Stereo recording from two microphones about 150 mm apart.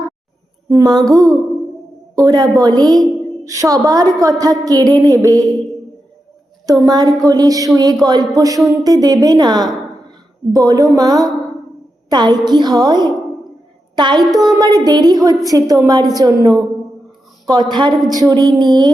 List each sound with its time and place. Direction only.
0.7 s a woman's voice: 25° right (ahead or behind)
6.8 s a woman's voice: 25° right (ahead or behind)
14.3 s speech: centre (ahead or behind)
14.5 s a woman's voice: 25° right (ahead or behind)